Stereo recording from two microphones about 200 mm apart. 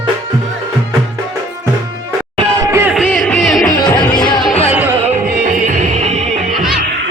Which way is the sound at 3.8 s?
20° left (ahead or behind).